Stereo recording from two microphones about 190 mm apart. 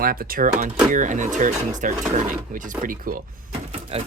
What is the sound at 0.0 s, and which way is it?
Speech, 50° right (ahead or behind).